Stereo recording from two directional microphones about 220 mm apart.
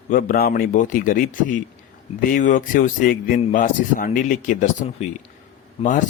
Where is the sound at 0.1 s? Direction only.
40° left (ahead or behind).